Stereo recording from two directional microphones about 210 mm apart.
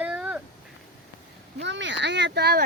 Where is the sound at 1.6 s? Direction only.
60° right (ahead or behind).